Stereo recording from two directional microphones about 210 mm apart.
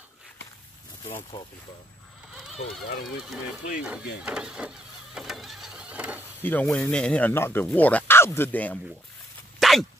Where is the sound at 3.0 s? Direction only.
Centre (ahead or behind).